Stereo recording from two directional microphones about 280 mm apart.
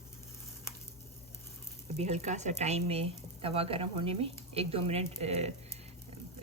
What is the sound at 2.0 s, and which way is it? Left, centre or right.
Speech, right.